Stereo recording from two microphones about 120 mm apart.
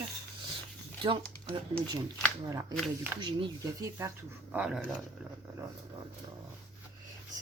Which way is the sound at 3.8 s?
25° right (ahead or behind).